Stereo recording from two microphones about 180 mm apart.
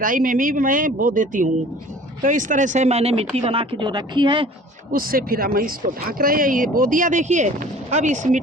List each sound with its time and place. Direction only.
0.0 s speech: 50° right (ahead or behind); by 4.4 s 25° right (ahead or behind)
4.9 s speech: 55° right (ahead or behind)